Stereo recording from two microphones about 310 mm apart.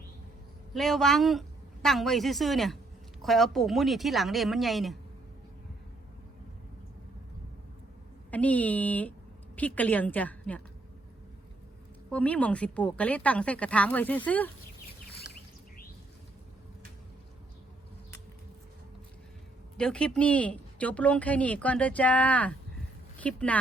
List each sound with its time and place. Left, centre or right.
0.7 s a woman's voice: centre
8.3 s a woman's voice: centre
12.1 s a woman's voice: centre
19.7 s a woman's voice: centre